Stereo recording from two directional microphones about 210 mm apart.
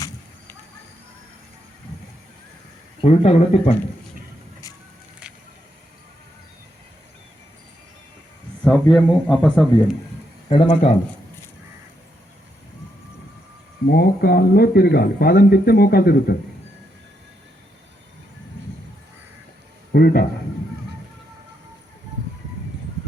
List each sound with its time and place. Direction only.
3.0 s speech: 30° left (ahead or behind)
8.6 s speech: 5° left (ahead or behind)
10.5 s speech: 30° left (ahead or behind)
13.9 s speech: 50° left (ahead or behind)
19.9 s a sound: 45° left (ahead or behind)